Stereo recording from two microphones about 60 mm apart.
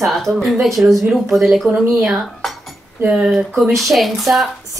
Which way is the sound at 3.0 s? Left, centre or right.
Centre.